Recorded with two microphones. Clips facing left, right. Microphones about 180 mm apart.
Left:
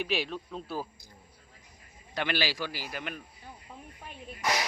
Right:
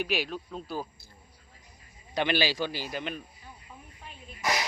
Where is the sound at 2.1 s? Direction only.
20° right (ahead or behind).